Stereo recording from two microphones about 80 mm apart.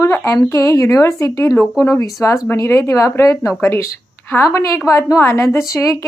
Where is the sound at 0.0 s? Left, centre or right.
Left.